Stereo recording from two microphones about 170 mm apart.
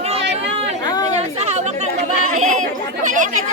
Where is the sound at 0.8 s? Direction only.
25° left (ahead or behind).